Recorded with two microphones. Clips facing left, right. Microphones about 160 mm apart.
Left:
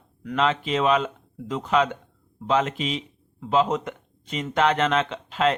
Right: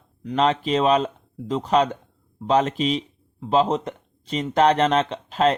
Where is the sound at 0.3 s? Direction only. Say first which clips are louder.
Right 3 dB; 35° right (ahead or behind).